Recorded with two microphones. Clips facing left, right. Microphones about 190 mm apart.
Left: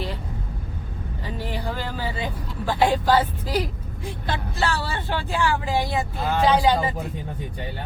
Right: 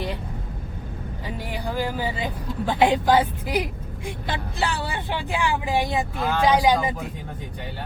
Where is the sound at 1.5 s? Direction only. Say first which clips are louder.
Right 4 dB; 10° right (ahead or behind).